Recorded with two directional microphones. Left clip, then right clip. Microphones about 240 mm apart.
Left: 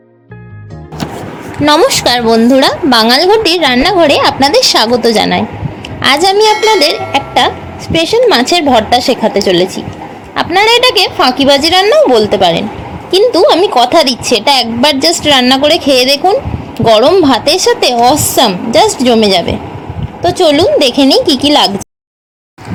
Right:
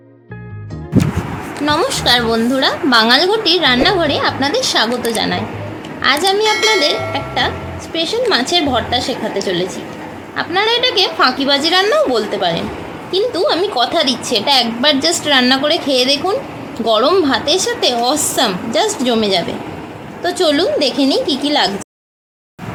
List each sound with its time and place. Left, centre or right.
1.6 s a woman's voice: left
6.5 s speech: centre
7.1 s a woman's voice: left